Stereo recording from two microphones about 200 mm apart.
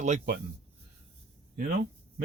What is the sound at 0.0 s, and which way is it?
Speech, 35° right (ahead or behind).